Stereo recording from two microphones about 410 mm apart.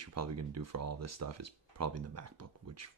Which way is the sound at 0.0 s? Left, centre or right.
Right.